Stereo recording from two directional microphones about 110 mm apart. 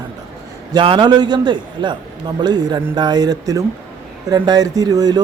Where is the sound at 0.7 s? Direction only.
50° right (ahead or behind).